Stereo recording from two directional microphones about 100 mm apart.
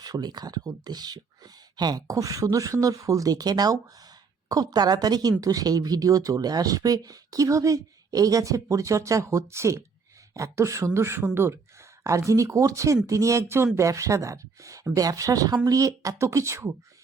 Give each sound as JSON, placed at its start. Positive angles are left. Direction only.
{"t": 0.0, "sound": "speech", "side_deg": -45}